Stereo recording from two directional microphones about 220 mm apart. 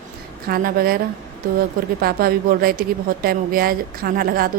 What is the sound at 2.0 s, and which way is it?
A woman's voice, 45° right (ahead or behind).